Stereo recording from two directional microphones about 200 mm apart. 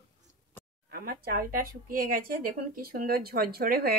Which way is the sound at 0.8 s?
50° right (ahead or behind).